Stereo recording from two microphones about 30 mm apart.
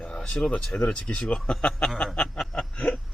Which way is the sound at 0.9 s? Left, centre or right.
Left.